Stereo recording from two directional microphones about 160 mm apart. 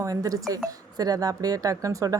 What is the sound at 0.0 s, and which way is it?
Speech, 20° right (ahead or behind).